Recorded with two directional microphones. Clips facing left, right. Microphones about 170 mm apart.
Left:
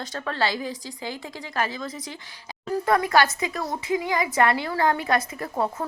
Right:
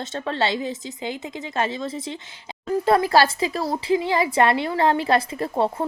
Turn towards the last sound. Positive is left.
turn(degrees=-25)  # may be behind; listen again after turning